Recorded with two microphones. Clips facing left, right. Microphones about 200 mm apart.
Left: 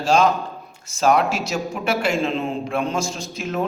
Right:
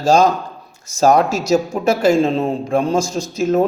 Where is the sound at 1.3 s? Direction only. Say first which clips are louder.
Right 8 dB; 40° right (ahead or behind).